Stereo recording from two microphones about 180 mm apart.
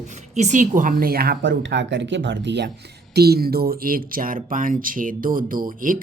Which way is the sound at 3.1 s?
60° right (ahead or behind).